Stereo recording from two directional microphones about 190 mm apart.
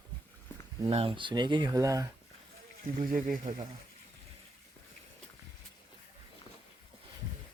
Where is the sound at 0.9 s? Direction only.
30° right (ahead or behind).